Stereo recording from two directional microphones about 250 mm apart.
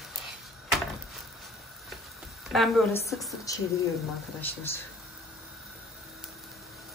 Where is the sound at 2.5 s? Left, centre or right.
Centre.